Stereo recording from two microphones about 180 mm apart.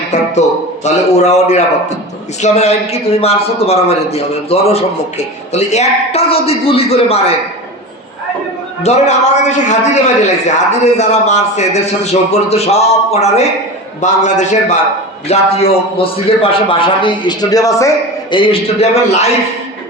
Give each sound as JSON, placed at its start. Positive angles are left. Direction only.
{"t": 0.9, "sound": "a man's voice", "side_deg": 40}
{"t": 8.8, "sound": "a man's voice", "side_deg": 40}